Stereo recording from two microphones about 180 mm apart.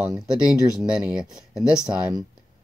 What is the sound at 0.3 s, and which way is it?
Speech, 5° right (ahead or behind).